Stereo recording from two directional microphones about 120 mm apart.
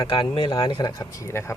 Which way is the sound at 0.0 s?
45° left (ahead or behind).